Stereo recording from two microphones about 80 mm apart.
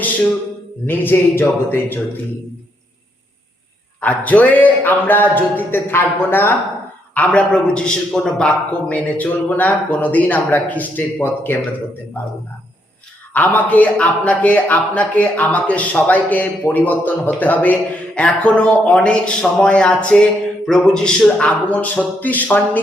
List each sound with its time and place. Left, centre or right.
0.9 s a man's voice: left
4.0 s a man's voice: centre
13.3 s a man's voice: left